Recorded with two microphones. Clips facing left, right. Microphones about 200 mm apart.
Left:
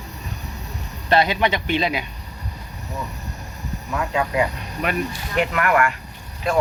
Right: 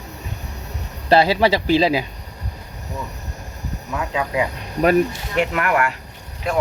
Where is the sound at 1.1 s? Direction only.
30° right (ahead or behind).